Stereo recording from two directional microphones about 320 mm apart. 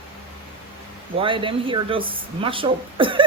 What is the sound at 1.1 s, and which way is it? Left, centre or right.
Speech, centre.